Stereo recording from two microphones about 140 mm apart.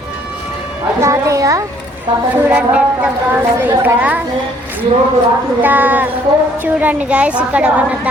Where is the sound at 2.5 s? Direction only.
10° right (ahead or behind).